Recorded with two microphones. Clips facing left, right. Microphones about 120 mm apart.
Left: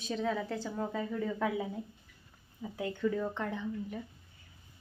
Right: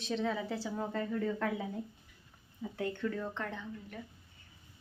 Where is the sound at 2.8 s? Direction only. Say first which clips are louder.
Left 3 dB; 5° left (ahead or behind).